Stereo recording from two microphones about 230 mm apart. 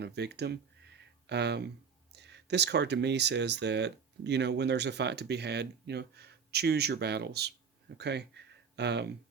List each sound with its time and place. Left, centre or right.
0.0 s speech: right